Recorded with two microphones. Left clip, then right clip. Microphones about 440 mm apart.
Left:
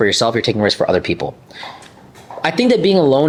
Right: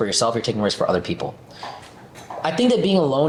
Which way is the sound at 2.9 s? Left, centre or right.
Left.